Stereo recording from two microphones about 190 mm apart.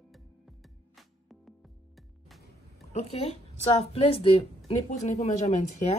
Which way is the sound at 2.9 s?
35° left (ahead or behind).